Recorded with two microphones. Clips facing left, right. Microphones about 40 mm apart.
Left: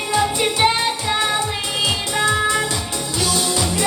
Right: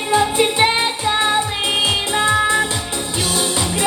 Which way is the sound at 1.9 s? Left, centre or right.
Right.